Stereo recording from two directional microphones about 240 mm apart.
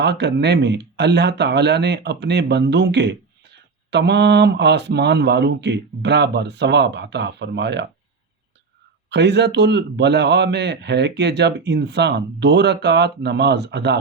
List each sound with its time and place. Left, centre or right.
0.0 s speech: right
9.0 s speech: right